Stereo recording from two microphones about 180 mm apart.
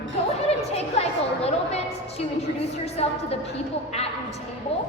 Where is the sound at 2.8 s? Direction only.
35° left (ahead or behind).